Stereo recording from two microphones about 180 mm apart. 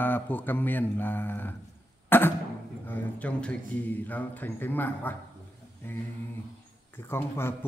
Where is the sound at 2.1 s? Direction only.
10° left (ahead or behind).